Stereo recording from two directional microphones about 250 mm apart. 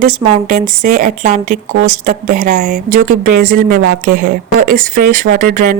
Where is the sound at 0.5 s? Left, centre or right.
Right.